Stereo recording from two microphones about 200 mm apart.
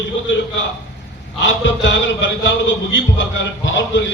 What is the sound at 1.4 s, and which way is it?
A man's voice, 65° left (ahead or behind).